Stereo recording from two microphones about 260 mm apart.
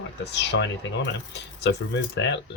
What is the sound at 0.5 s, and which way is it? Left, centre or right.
Speech, left.